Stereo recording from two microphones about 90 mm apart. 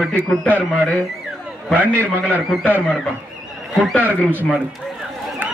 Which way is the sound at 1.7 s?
15° left (ahead or behind).